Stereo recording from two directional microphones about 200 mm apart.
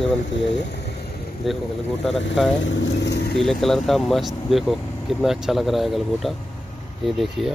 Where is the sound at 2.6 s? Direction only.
60° left (ahead or behind).